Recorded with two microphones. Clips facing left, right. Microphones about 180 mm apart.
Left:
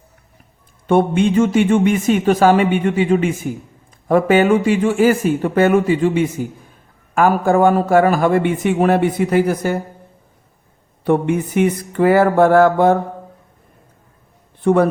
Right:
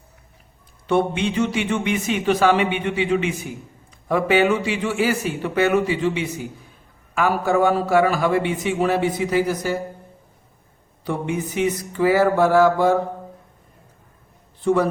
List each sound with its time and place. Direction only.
0.9 s a man's voice: 50° left (ahead or behind)
11.0 s mantra: 55° left (ahead or behind)
14.6 s a man's voice: 55° left (ahead or behind)